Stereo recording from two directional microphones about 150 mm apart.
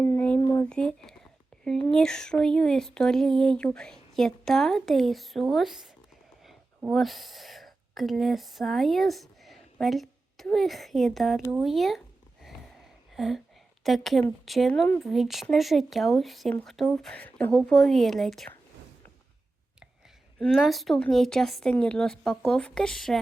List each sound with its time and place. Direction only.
0.0 s a sound: 20° left (ahead or behind)
0.6 s speech: 5° left (ahead or behind)
11.5 s a sound: centre (ahead or behind)
13.1 s speech: centre (ahead or behind)
15.0 s speech: centre (ahead or behind)
20.4 s speech: centre (ahead or behind)